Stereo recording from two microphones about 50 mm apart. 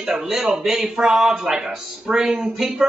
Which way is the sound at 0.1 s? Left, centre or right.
Centre.